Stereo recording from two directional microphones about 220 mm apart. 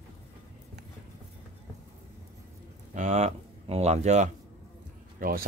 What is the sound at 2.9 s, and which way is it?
Speech, 30° right (ahead or behind).